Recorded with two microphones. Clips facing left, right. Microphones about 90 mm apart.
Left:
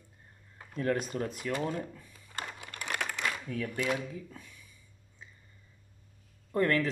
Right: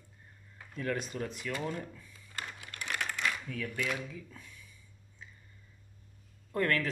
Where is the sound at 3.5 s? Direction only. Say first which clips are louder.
Left 4 dB; 40° left (ahead or behind).